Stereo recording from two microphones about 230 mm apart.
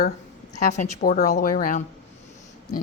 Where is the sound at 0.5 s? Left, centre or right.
Left.